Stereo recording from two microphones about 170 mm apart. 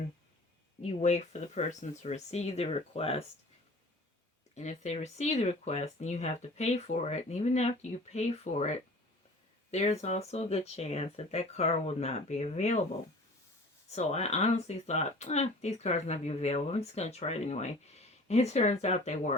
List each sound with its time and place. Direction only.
0.8 s speech: 40° left (ahead or behind)
4.5 s speech: 45° left (ahead or behind)
13.9 s speech: 40° left (ahead or behind)